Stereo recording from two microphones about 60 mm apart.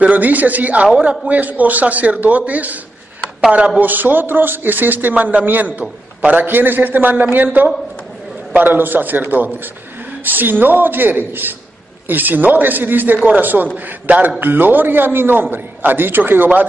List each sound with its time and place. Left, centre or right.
0.0 s a man's voice: right
3.9 s a man's voice: right
8.5 s a man's voice: right